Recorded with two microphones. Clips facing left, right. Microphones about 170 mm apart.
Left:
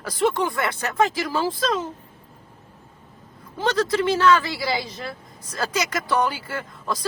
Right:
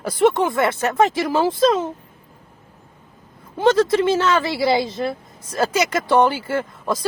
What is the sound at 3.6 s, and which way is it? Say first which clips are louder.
Speech: right 6 dB; 20° right (ahead or behind).